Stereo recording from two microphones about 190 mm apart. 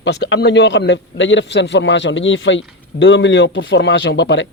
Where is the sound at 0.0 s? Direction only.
65° left (ahead or behind).